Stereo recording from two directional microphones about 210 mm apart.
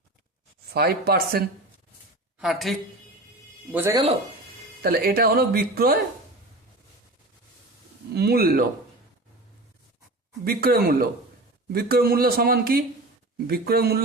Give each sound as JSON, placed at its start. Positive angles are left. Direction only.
{"t": 0.7, "sound": "speech", "side_deg": -50}
{"t": 2.4, "sound": "speech", "side_deg": 0}
{"t": 3.7, "sound": "speech", "side_deg": -10}
{"t": 4.8, "sound": "speech", "side_deg": -45}
{"t": 8.1, "sound": "speech", "side_deg": -50}
{"t": 10.4, "sound": "speech", "side_deg": -45}